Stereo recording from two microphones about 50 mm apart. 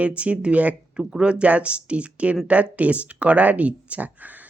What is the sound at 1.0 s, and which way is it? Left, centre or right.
Speech, centre.